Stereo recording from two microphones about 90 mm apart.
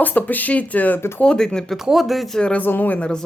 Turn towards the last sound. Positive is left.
turn(degrees=15)  # may be behind; listen again after turning